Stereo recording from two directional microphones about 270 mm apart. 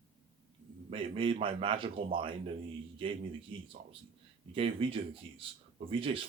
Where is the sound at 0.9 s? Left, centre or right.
Centre.